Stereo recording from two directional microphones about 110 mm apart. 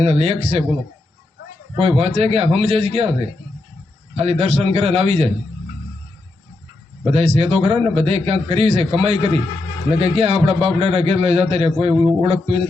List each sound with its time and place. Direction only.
0.0 s a man's voice: 65° right (ahead or behind)
1.7 s a man's voice: 60° right (ahead or behind)
4.2 s a man's voice: 70° right (ahead or behind)
7.0 s a man's voice: 65° right (ahead or behind); by 9.4 s 80° right
9.9 s a man's voice: 65° right (ahead or behind)